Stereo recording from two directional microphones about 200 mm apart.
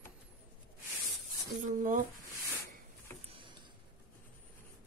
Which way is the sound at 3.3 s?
25° right (ahead or behind).